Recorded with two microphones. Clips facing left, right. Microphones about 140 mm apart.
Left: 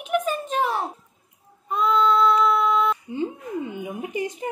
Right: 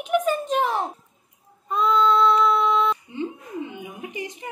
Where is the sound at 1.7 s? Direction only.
5° left (ahead or behind).